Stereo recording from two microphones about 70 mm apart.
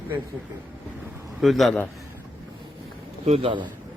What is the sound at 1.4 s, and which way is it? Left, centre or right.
Speech, centre.